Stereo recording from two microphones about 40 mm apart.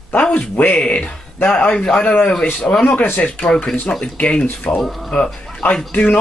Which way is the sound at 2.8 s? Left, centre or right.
Left.